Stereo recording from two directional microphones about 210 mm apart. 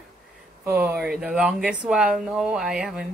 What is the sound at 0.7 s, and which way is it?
Speech, 10° right (ahead or behind).